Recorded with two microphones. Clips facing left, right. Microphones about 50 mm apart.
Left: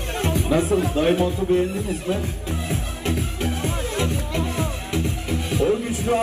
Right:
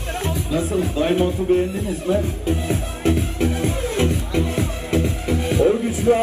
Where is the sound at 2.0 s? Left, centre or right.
Right.